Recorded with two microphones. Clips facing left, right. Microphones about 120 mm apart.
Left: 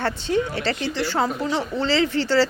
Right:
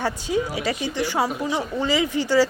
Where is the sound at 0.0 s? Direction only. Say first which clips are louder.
Left 1 dB; 10° right (ahead or behind).